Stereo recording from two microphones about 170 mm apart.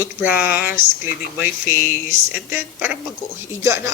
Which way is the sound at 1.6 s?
60° left (ahead or behind).